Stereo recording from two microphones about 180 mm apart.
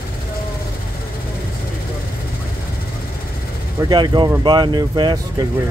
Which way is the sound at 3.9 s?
25° right (ahead or behind).